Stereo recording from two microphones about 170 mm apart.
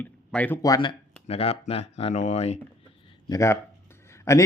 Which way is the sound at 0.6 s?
25° left (ahead or behind).